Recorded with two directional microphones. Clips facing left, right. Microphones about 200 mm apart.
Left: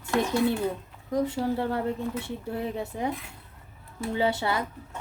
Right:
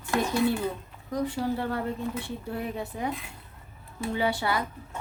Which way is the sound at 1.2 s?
25° left (ahead or behind).